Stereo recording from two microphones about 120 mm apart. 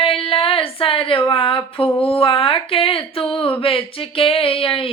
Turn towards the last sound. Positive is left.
turn(degrees=50)  # may be behind; listen again after turning